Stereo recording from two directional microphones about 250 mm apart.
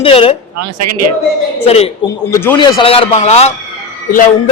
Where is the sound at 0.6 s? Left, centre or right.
Right.